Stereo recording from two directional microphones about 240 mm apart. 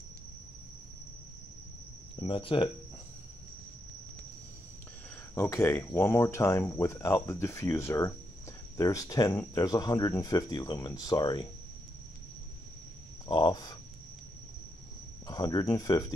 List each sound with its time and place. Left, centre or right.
2.1 s speech: left
5.3 s speech: centre
13.3 s speech: centre
15.2 s speech: centre